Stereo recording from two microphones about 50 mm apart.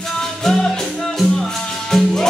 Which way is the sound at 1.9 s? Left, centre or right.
Centre.